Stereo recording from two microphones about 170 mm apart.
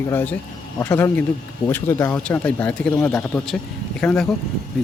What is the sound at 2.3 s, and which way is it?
Speech, 10° left (ahead or behind).